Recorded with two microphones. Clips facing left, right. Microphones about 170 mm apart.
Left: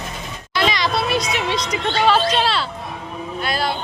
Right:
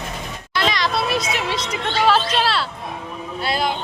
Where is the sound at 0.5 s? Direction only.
Centre (ahead or behind).